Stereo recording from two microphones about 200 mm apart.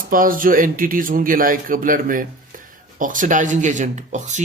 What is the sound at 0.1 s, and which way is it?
Speech, 45° right (ahead or behind).